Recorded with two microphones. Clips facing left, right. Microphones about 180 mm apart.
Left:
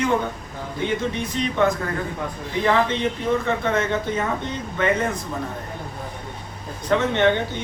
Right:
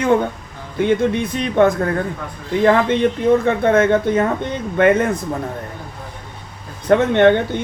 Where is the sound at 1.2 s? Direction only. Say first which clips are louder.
Right 6 dB; 55° right (ahead or behind).